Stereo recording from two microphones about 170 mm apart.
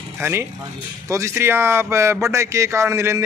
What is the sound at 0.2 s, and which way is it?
A man's voice, 15° right (ahead or behind).